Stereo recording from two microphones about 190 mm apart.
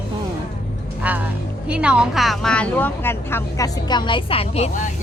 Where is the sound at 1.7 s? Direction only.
5° right (ahead or behind).